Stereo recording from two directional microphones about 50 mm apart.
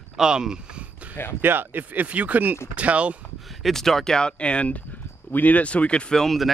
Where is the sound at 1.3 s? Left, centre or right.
Right.